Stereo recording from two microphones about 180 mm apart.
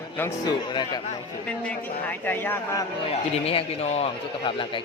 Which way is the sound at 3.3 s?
35° left (ahead or behind).